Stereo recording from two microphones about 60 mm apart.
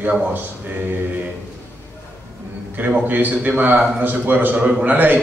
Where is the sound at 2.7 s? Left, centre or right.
Right.